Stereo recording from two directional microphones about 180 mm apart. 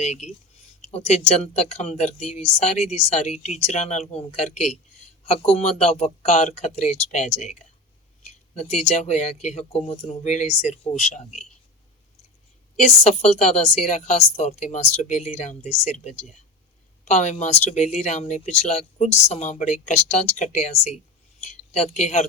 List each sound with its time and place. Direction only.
0.0 s speech: 40° left (ahead or behind)
12.8 s speech: 40° left (ahead or behind)